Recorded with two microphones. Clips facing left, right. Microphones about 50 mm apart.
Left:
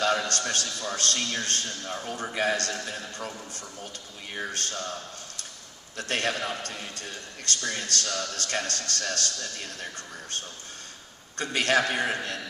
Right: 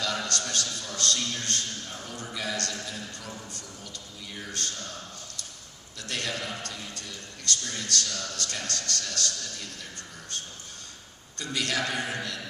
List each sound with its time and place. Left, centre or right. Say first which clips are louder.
0.0 s a sound: left 5 dB; left
0.8 s a man's voice: left 2 dB; left
5.9 s a man's voice: left 5 dB; left
11.3 s a man's voice: left 6 dB; left